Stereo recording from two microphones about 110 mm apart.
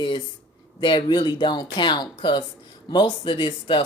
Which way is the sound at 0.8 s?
45° left (ahead or behind).